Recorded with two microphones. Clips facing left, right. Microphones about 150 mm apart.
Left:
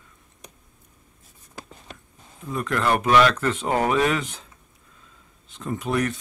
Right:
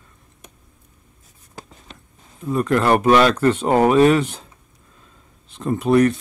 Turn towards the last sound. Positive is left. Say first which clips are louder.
# right 9 dB
turn(degrees=-35)  # may be behind; listen again after turning